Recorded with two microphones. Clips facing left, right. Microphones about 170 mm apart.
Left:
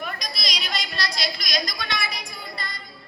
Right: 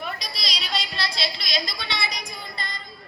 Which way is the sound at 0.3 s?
30° right (ahead or behind).